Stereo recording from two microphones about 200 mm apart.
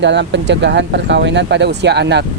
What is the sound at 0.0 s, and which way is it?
Speech, 60° right (ahead or behind).